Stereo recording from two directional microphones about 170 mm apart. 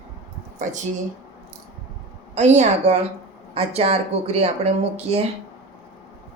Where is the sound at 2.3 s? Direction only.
40° right (ahead or behind).